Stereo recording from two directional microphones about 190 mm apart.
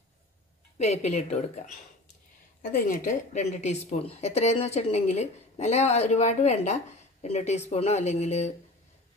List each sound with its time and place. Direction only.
0.7 s a woman's voice: 35° left (ahead or behind)